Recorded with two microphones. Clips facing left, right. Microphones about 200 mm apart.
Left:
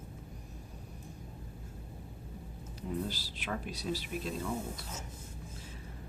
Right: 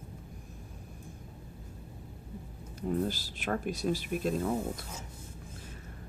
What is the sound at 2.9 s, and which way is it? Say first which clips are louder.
Speech: right 5 dB; 50° right (ahead or behind).